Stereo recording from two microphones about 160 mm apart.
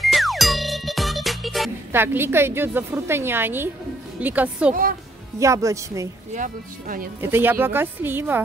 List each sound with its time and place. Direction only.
0.0 s music: centre (ahead or behind)
1.9 s a woman's voice: 15° right (ahead or behind)
5.4 s speech: 20° right (ahead or behind)
6.3 s speech: 60° right (ahead or behind)
7.2 s a woman's voice: 15° right (ahead or behind)